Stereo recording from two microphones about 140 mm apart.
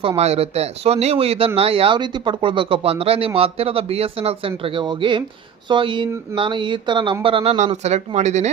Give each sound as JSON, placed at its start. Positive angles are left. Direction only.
{"t": 0.2, "sound": "a man's voice", "side_deg": -50}